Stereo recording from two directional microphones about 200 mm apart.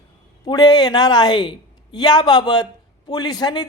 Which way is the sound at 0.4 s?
20° left (ahead or behind).